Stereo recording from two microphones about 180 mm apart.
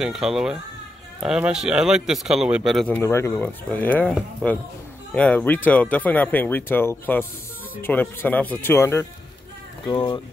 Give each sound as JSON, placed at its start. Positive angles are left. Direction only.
{"t": 0.0, "sound": "speech", "side_deg": 0}
{"t": 2.9, "sound": "speech", "side_deg": 15}